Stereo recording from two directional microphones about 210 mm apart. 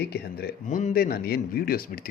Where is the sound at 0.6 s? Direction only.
35° left (ahead or behind).